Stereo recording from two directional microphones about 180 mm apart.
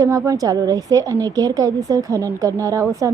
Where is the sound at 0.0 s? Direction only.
20° right (ahead or behind).